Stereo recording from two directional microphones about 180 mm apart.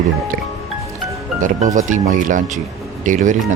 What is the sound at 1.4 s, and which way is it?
Speech, 45° right (ahead or behind).